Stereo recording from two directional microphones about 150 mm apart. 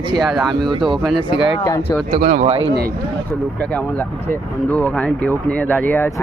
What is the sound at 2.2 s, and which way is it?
Speech, 55° right (ahead or behind).